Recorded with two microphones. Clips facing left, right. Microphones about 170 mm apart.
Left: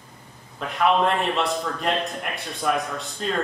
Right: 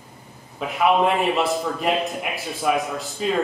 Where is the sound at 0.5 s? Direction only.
5° right (ahead or behind).